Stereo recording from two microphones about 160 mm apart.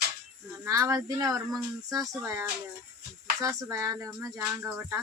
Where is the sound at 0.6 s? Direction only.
20° right (ahead or behind).